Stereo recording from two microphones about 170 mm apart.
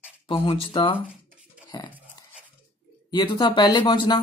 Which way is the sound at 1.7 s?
25° left (ahead or behind).